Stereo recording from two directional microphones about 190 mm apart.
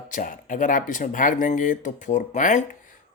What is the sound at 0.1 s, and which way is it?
Speech, 45° left (ahead or behind).